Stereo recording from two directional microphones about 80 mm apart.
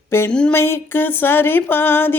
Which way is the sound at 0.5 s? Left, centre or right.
Left.